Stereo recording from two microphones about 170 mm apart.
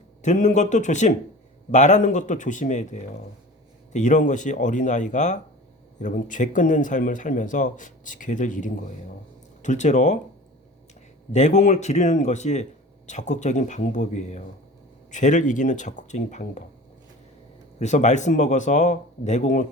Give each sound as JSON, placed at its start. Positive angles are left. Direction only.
{"t": 0.2, "sound": "speech", "side_deg": 45}
{"t": 11.3, "sound": "speech", "side_deg": 45}
{"t": 17.7, "sound": "speech", "side_deg": 45}